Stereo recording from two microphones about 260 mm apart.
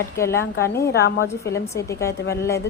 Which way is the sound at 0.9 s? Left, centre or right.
Left.